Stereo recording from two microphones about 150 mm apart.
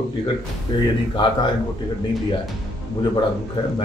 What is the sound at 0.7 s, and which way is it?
Speech, 30° left (ahead or behind).